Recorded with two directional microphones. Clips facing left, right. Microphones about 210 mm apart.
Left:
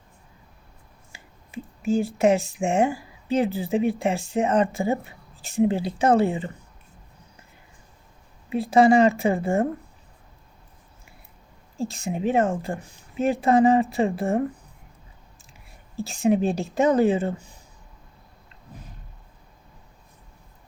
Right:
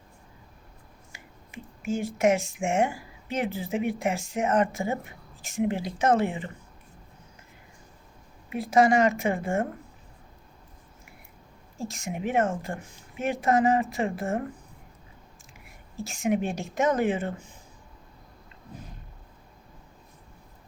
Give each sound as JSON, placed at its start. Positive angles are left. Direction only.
{"t": 1.1, "sound": "speech", "side_deg": 35}
{"t": 8.4, "sound": "a woman's voice", "side_deg": 30}
{"t": 11.8, "sound": "a woman's voice", "side_deg": 30}
{"t": 16.0, "sound": "a woman's voice", "side_deg": 35}